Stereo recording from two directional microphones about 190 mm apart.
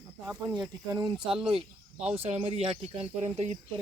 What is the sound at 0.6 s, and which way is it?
Speech, 20° right (ahead or behind).